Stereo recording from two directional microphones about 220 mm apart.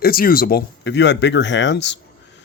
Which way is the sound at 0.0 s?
40° left (ahead or behind).